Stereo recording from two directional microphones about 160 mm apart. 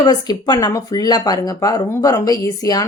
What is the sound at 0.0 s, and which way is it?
Speech, 25° left (ahead or behind).